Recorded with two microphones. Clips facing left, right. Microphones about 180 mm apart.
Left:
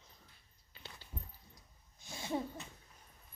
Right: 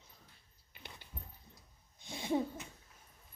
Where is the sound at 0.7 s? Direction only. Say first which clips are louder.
Left 1 dB; 15° right (ahead or behind).